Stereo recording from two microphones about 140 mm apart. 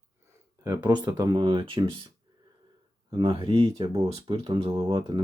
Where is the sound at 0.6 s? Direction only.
25° right (ahead or behind).